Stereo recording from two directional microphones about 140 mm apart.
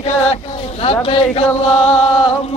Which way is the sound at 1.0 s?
45° left (ahead or behind).